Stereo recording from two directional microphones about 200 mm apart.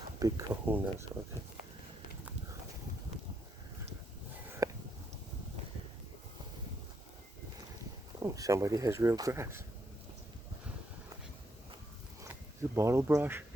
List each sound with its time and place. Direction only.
0.2 s speech: 15° right (ahead or behind)
4.6 s a sound: 15° right (ahead or behind)
8.2 s speech: 15° right (ahead or behind)
12.2 s speech: 15° right (ahead or behind)